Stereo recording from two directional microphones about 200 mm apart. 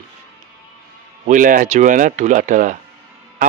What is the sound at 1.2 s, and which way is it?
A man's voice, 40° right (ahead or behind).